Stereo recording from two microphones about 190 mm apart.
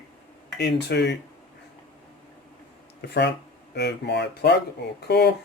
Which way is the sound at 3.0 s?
65° left (ahead or behind).